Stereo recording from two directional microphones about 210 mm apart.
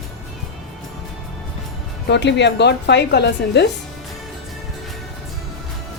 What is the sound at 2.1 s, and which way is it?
A woman's voice, 55° left (ahead or behind).